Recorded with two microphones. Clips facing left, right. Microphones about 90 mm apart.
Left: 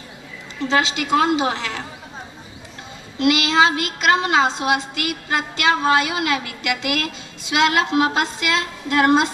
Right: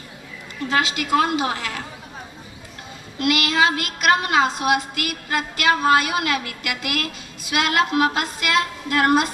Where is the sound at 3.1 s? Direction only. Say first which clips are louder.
Left 4 dB; 25° left (ahead or behind).